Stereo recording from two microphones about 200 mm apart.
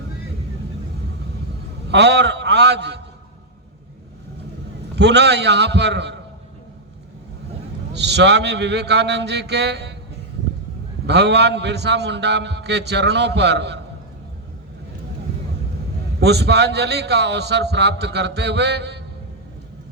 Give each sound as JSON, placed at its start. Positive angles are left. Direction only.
{"t": 1.9, "sound": "a man's voice", "side_deg": -60}
{"t": 4.9, "sound": "a man's voice", "side_deg": -60}
{"t": 7.9, "sound": "a man's voice", "side_deg": -60}
{"t": 11.0, "sound": "a man's voice", "side_deg": -60}
{"t": 16.2, "sound": "a man's voice", "side_deg": -55}